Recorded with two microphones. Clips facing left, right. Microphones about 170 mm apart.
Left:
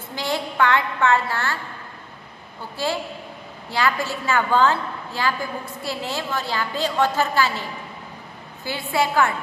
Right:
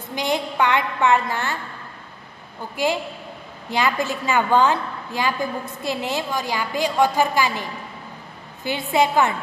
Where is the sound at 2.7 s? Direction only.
15° right (ahead or behind).